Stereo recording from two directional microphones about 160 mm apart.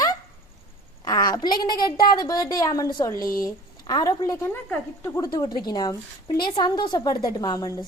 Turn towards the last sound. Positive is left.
turn(degrees=25)  # may be behind; listen again after turning